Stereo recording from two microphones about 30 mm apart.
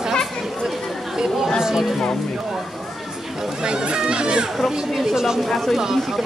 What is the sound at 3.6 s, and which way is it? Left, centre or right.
Speech, right.